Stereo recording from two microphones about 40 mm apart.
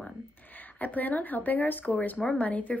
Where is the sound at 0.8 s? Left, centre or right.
Left.